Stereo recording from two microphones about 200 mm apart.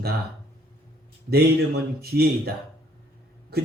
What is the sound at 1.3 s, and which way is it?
Speech, 50° right (ahead or behind).